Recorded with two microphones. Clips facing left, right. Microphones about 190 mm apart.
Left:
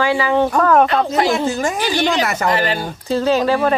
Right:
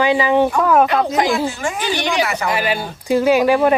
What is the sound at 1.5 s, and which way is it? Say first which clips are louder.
Speech: left 3 dB; 40° left (ahead or behind).